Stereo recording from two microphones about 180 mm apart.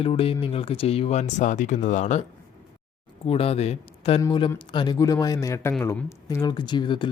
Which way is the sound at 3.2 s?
30° left (ahead or behind).